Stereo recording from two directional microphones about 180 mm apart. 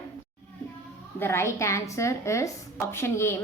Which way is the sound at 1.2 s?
15° left (ahead or behind).